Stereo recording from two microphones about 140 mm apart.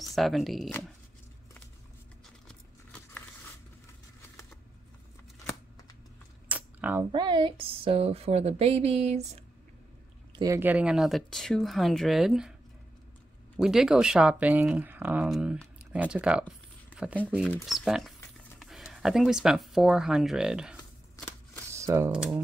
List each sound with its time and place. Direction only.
0.0 s speech: centre (ahead or behind)
2.4 s keys jangling: 10° left (ahead or behind)
6.5 s camera: 10° right (ahead or behind)
7.1 s speech: 35° right (ahead or behind); by 9.4 s 50° right (ahead or behind)
10.3 s speech: 25° right (ahead or behind)
10.6 s speech: 10° right (ahead or behind)
13.6 s speech: 5° right (ahead or behind)
15.8 s a sound: 10° right (ahead or behind)
17.6 s speech: centre (ahead or behind)
21.2 s a sound: 25° left (ahead or behind)
21.7 s typing: 20° right (ahead or behind)